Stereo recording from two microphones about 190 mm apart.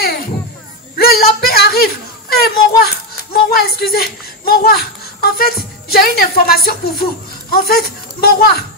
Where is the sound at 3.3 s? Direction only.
55° left (ahead or behind).